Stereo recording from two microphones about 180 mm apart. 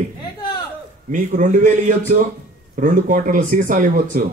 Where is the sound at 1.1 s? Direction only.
45° right (ahead or behind).